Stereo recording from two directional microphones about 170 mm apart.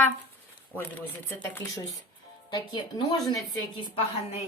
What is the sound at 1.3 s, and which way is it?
A woman's voice, 15° left (ahead or behind).